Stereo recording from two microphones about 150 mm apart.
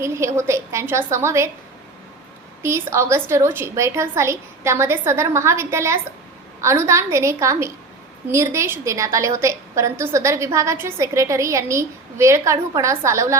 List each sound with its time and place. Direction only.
0.0 s a woman's voice: 20° right (ahead or behind)
2.6 s a woman's voice: 15° right (ahead or behind)